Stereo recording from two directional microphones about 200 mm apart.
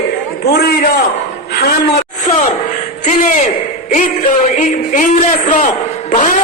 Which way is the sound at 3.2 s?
40° left (ahead or behind).